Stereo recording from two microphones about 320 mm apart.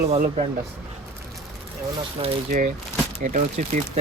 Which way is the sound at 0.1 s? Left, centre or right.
Right.